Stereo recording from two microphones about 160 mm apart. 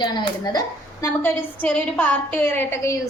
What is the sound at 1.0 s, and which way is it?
A woman's voice, 10° left (ahead or behind).